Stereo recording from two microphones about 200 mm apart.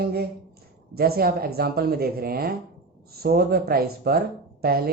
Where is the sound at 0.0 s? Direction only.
50° right (ahead or behind).